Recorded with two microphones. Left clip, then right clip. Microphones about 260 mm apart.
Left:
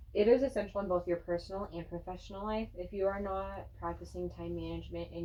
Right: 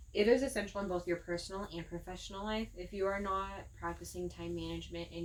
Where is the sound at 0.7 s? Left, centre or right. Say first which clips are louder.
Left 4 dB; right.